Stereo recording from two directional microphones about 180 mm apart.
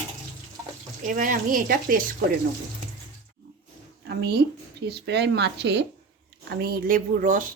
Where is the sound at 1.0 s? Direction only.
50° right (ahead or behind).